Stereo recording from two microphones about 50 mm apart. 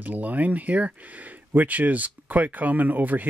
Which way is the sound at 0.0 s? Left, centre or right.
Right.